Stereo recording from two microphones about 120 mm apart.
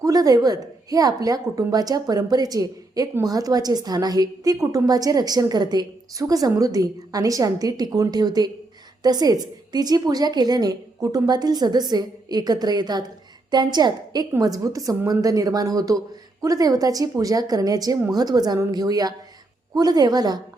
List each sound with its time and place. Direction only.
0.0 s a woman's voice: 30° right (ahead or behind)